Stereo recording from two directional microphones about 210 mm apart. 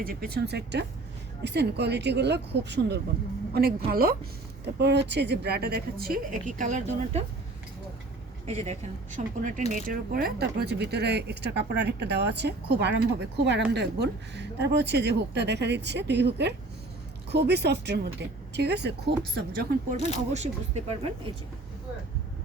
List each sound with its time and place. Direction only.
0.0 s speech: 45° right (ahead or behind)
8.4 s speech: 30° right (ahead or behind); by 19.5 s 50° right (ahead or behind)
20.3 s speech: 30° right (ahead or behind)